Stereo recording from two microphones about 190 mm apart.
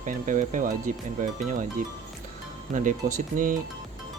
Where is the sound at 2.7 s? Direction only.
40° right (ahead or behind).